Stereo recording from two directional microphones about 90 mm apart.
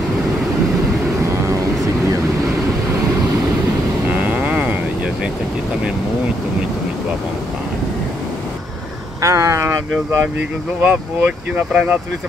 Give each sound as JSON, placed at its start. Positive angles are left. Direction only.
{"t": 1.2, "sound": "vehicle", "side_deg": -35}
{"t": 4.1, "sound": "vehicle", "side_deg": -15}
{"t": 9.2, "sound": "vehicle", "side_deg": -35}
{"t": 10.8, "sound": "speech", "side_deg": -15}